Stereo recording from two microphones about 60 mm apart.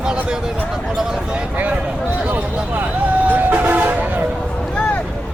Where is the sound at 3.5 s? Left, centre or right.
Right.